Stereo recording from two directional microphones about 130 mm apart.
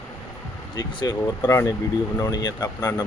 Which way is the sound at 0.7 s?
30° left (ahead or behind).